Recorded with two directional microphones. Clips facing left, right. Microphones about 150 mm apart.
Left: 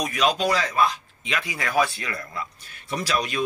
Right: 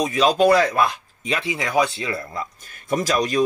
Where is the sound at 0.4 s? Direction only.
55° right (ahead or behind).